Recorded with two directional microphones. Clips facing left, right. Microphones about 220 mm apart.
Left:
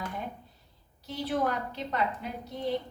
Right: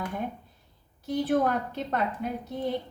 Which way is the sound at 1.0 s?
50° right (ahead or behind).